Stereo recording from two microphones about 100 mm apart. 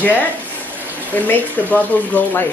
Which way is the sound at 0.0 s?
15° left (ahead or behind).